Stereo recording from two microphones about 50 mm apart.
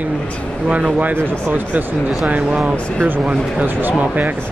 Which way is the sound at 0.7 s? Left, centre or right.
Right.